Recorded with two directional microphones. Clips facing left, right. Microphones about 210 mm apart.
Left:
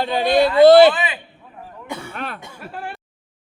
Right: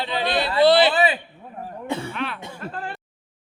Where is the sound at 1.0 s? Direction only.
35° right (ahead or behind).